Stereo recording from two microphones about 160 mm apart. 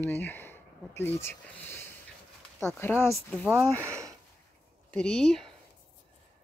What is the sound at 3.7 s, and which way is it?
Sniff, 15° right (ahead or behind).